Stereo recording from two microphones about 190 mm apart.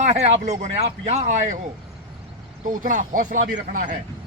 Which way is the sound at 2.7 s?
45° right (ahead or behind).